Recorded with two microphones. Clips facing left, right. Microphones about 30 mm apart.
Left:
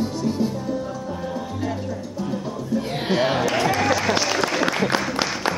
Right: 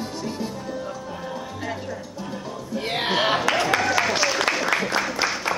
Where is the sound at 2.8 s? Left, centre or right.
Right.